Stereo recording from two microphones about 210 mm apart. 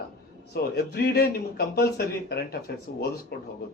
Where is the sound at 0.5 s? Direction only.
50° left (ahead or behind).